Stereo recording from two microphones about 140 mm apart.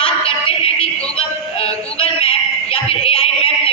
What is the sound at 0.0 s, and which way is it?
Music, 40° left (ahead or behind).